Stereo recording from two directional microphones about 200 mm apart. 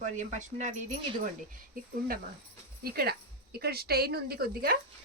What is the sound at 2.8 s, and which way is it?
A woman's voice, 50° right (ahead or behind).